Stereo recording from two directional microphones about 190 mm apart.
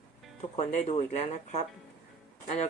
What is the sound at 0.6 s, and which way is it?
Speech, 40° left (ahead or behind).